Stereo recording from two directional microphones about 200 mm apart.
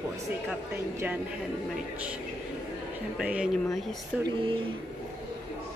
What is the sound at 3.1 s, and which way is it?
Speech, 5° right (ahead or behind).